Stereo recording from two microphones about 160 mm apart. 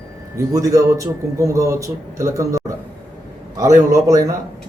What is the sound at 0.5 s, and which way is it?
A man's voice, 20° right (ahead or behind).